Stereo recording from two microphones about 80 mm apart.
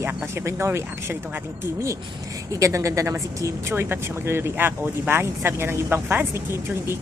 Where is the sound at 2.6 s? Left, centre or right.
Right.